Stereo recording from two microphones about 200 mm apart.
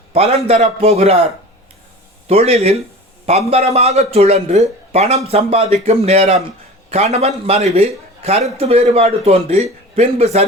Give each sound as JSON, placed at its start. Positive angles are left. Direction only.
{"t": 0.1, "sound": "speech", "side_deg": -30}
{"t": 2.2, "sound": "speech", "side_deg": -30}